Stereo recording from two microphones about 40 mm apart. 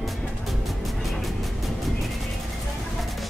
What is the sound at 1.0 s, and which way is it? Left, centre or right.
Music, centre.